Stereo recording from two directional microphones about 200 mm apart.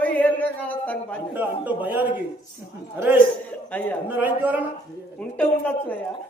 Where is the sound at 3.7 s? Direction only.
10° left (ahead or behind).